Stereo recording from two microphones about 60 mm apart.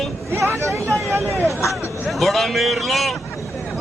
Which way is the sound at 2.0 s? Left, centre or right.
Centre.